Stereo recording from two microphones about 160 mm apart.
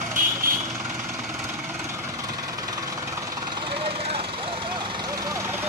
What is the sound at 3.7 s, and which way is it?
Vehicle, 35° right (ahead or behind).